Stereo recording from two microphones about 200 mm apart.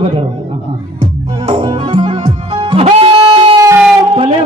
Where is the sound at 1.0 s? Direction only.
25° right (ahead or behind).